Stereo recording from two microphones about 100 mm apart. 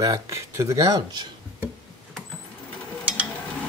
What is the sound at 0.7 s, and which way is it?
Speech, 40° right (ahead or behind).